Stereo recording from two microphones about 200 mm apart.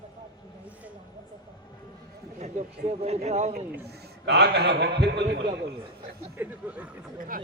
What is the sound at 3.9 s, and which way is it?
A man's voice, 55° right (ahead or behind).